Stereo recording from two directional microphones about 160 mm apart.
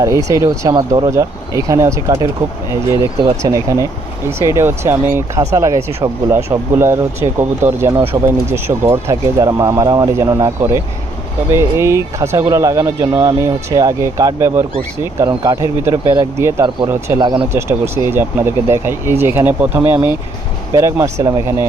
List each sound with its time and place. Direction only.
0.0 s speech: 20° right (ahead or behind)